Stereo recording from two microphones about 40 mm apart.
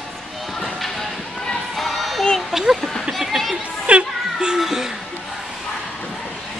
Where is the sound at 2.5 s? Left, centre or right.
Centre.